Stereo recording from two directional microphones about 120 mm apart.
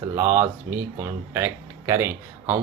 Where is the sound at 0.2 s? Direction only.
25° right (ahead or behind).